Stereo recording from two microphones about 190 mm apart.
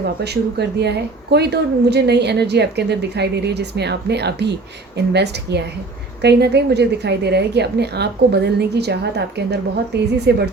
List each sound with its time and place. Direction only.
0.0 s speech: 60° right (ahead or behind)